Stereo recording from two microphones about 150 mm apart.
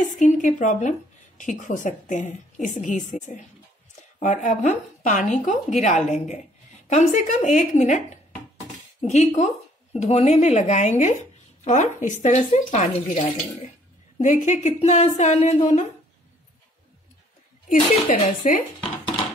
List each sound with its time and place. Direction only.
0.2 s a woman's voice: 55° left (ahead or behind)
14.2 s speech: 55° left (ahead or behind)
17.6 s a woman's voice: 55° left (ahead or behind)